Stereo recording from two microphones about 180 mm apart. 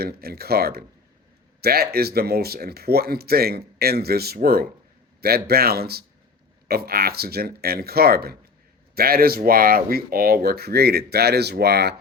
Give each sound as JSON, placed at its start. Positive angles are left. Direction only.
{"t": 0.0, "sound": "speech", "side_deg": -60}